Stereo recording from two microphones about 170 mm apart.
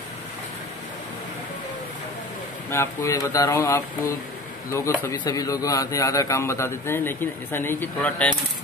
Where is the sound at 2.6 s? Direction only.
15° left (ahead or behind).